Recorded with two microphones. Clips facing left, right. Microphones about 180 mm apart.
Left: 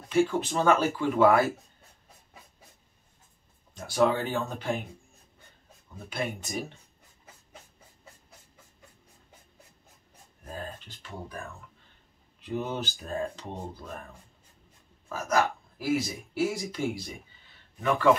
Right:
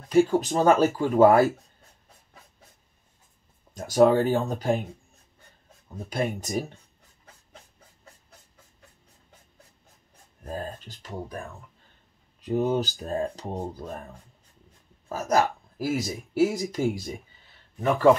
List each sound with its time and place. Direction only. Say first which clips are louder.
0.1 s speech: right 5 dB; 40° right (ahead or behind)
3.7 s speech: right 6 dB; 40° right (ahead or behind)
6.0 s speech: right 5 dB; 40° right (ahead or behind)
10.5 s speech: right 5 dB; 40° right (ahead or behind)
12.4 s speech: right 8 dB; 40° right (ahead or behind)
15.0 s speech: right 3 dB; 40° right (ahead or behind)